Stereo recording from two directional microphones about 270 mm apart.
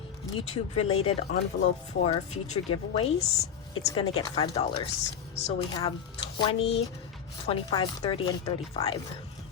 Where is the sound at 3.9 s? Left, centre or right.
Centre.